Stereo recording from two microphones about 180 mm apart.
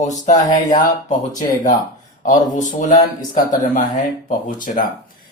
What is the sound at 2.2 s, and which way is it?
Speech, 45° left (ahead or behind).